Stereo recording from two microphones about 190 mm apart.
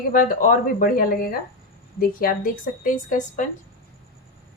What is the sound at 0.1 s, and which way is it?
A woman's voice, 45° left (ahead or behind).